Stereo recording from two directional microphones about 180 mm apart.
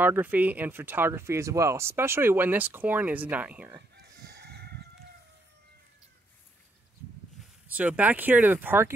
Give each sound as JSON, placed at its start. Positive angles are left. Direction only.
{"t": 0.0, "sound": "speech", "side_deg": -10}
{"t": 4.4, "sound": "chicken", "side_deg": -65}
{"t": 7.3, "sound": "speech", "side_deg": -5}